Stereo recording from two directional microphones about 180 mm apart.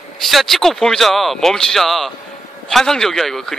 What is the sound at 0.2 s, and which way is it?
Speech, centre (ahead or behind).